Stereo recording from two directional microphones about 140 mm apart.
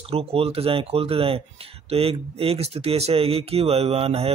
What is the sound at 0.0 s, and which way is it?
Speech, 45° right (ahead or behind).